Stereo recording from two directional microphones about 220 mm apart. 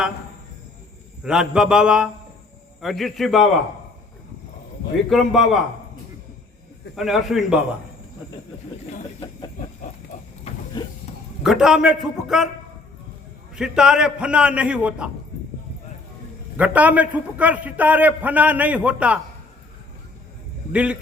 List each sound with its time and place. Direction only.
1.2 s a man's voice: 5° right (ahead or behind)
5.0 s a man's voice: centre (ahead or behind)
6.9 s a man's voice: centre (ahead or behind)
10.1 s vehicle: 35° left (ahead or behind)
10.8 s a sound: 20° left (ahead or behind)
11.4 s a man's voice: centre (ahead or behind)
13.6 s a man's voice: 5° right (ahead or behind)
16.6 s a man's voice: 5° right (ahead or behind)
20.7 s a man's voice: 5° right (ahead or behind)